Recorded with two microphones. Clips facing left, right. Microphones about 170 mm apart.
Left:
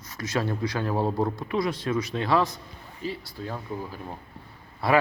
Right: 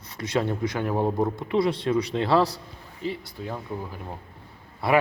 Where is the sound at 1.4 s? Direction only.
25° right (ahead or behind).